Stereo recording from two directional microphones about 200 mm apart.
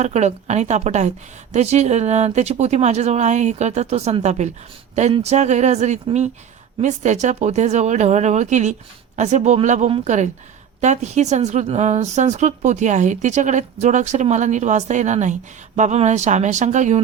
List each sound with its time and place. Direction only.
0.0 s a woman's voice: 35° right (ahead or behind)